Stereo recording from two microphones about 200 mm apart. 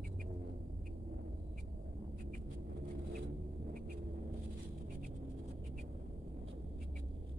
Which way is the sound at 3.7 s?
45° right (ahead or behind).